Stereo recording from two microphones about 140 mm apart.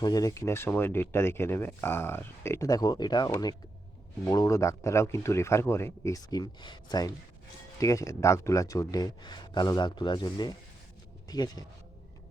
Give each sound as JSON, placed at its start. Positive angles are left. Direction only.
{"t": 0.0, "sound": "speech", "side_deg": 25}